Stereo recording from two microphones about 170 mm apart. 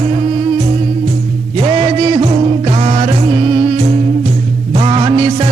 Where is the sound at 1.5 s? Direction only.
30° right (ahead or behind).